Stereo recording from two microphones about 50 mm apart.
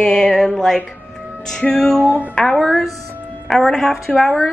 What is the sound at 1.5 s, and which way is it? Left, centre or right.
A woman's voice, centre.